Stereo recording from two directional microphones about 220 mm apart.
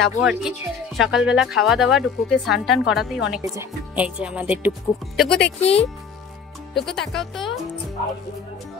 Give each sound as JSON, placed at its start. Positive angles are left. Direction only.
{"t": 0.0, "sound": "speech", "side_deg": 0}
{"t": 5.6, "sound": "speech", "side_deg": 25}
{"t": 6.9, "sound": "speech", "side_deg": 0}